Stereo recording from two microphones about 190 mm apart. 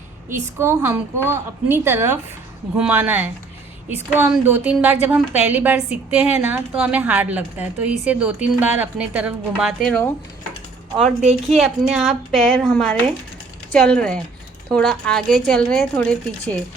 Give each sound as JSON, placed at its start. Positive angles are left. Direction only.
{"t": 0.3, "sound": "a woman's voice", "side_deg": -10}
{"t": 11.0, "sound": "a woman's voice", "side_deg": -35}
{"t": 11.5, "sound": "speech", "side_deg": 0}